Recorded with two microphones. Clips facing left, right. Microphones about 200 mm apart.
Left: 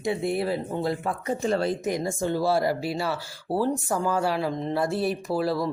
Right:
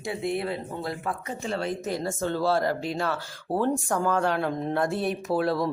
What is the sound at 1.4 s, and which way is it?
Speech, 40° left (ahead or behind).